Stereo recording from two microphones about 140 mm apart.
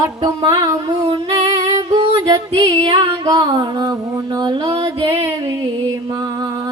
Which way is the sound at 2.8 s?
30° right (ahead or behind).